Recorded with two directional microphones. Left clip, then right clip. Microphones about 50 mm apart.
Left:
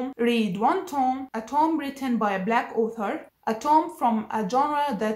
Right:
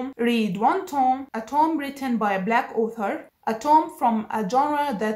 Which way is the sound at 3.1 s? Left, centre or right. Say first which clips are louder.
Right 1 dB; right.